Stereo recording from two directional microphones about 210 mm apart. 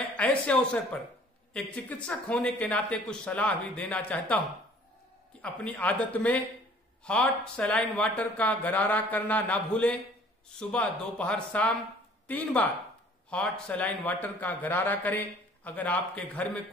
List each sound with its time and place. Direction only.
0.2 s a man's voice: 5° left (ahead or behind)
5.4 s a man's voice: 5° left (ahead or behind)